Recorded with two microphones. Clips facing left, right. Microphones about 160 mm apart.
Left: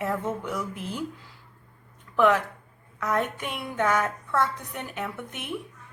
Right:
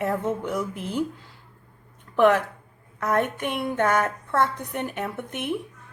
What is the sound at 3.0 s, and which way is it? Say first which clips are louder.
A woman's voice: right 3 dB; 50° right (ahead or behind).